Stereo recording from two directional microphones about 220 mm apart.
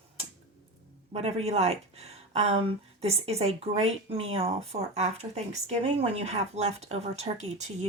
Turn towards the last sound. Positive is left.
turn(degrees=-30)  # may be behind; listen again after turning